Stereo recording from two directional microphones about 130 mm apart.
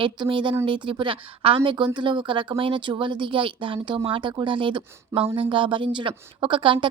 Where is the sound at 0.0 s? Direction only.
40° right (ahead or behind).